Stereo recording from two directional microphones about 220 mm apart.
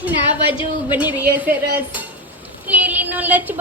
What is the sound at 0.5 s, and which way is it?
Speech, 25° left (ahead or behind).